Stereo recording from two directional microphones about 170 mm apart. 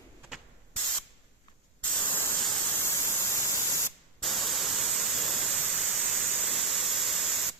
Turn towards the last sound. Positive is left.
turn(degrees=0)  # may be behind; listen again after turning